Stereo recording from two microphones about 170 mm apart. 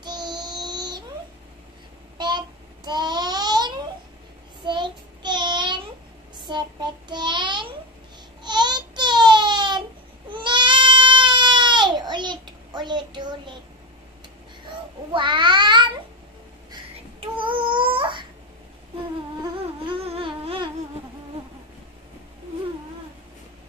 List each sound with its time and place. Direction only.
0.0 s child singing: 25° right (ahead or behind)
2.1 s child singing: 25° right (ahead or behind)
8.4 s a sound: 25° right (ahead or behind)
10.3 s goat: 30° right (ahead or behind)
15.1 s cat: 30° right (ahead or behind)
17.4 s a sound: 30° right (ahead or behind)
19.9 s humming: 35° right (ahead or behind)